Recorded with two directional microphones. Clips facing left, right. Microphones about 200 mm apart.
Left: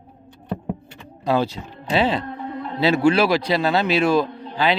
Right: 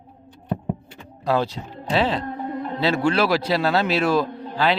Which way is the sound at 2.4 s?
45° right (ahead or behind).